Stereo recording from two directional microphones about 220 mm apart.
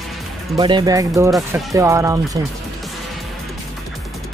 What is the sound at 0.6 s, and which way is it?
Speech, 20° right (ahead or behind).